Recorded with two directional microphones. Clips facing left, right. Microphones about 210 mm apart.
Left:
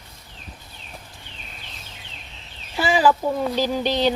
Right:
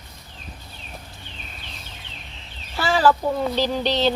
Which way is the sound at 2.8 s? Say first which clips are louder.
Even; 15° left (ahead or behind).